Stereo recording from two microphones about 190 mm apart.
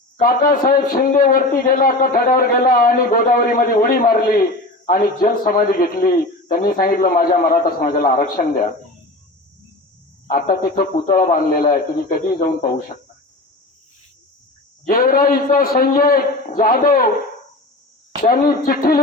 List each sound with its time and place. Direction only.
0.2 s a man's voice: 50° left (ahead or behind)
10.2 s a man's voice: 50° left (ahead or behind)
14.8 s a man's voice: 50° left (ahead or behind)
18.2 s a man's voice: 50° left (ahead or behind)